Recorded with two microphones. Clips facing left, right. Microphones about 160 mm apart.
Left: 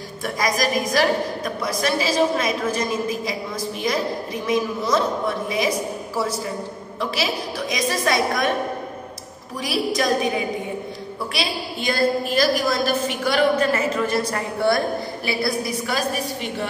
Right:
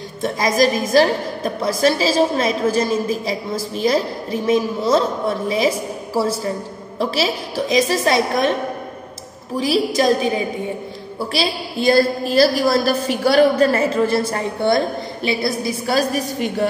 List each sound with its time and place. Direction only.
0.2 s a woman's voice: 25° right (ahead or behind)
6.2 s a woman's voice: 30° right (ahead or behind)
9.6 s a woman's voice: 25° right (ahead or behind)
11.3 s a woman's voice: 35° right (ahead or behind)